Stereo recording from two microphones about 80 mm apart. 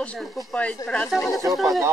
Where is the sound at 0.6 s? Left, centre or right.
Centre.